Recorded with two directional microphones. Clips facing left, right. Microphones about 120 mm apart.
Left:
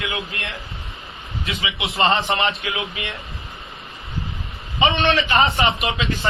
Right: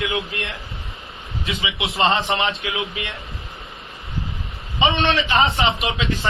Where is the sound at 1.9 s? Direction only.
Centre (ahead or behind).